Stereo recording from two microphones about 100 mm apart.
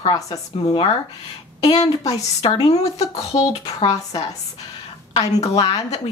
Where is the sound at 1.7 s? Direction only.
40° left (ahead or behind).